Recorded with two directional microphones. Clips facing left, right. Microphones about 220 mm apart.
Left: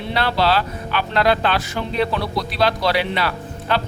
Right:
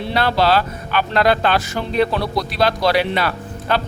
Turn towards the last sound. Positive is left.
turn(degrees=-45)  # may be behind; listen again after turning